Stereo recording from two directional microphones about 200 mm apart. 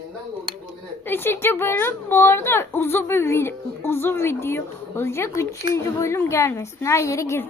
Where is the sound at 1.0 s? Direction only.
10° left (ahead or behind).